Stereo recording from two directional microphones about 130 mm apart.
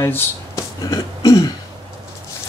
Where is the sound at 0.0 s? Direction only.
20° left (ahead or behind).